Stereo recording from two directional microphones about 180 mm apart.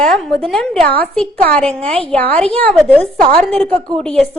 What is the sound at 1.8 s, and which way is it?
Speech, 35° right (ahead or behind).